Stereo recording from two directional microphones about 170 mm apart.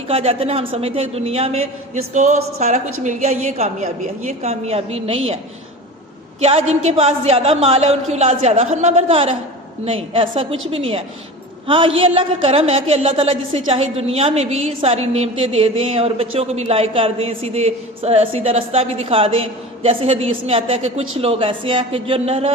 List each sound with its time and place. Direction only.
0.1 s a woman's voice: 35° right (ahead or behind)
6.4 s a woman's voice: 35° right (ahead or behind)